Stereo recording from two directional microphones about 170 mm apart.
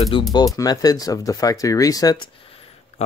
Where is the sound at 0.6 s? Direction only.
20° left (ahead or behind).